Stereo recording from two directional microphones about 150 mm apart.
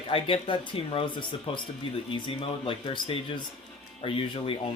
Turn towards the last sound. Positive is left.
turn(degrees=40)  # may be behind; listen again after turning